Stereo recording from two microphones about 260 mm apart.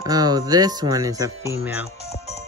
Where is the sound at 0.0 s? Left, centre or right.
Centre.